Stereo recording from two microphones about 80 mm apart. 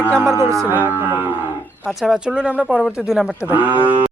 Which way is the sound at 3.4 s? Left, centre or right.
Centre.